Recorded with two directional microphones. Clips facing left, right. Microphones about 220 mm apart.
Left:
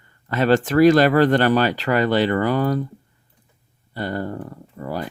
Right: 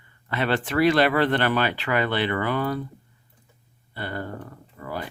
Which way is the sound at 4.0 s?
40° left (ahead or behind).